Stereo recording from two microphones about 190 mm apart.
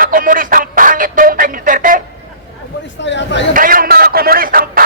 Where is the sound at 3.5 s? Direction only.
45° right (ahead or behind).